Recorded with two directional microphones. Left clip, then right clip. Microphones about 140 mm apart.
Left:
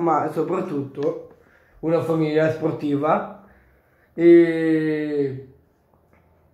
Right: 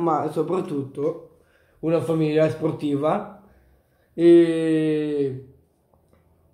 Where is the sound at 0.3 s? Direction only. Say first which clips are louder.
Left 1 dB; 20° right (ahead or behind).